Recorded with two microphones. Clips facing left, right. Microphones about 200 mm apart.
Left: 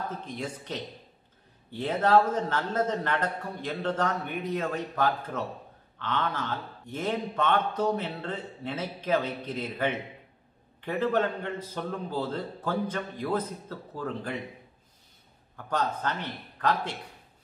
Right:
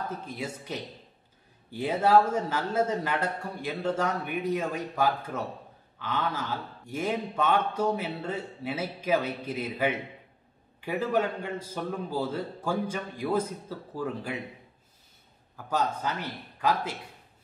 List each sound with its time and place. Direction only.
0.2 s a man's voice: 10° right (ahead or behind)
15.5 s a man's voice: 10° right (ahead or behind)